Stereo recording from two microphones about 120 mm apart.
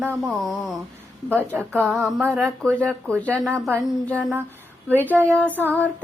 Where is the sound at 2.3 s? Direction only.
5° left (ahead or behind).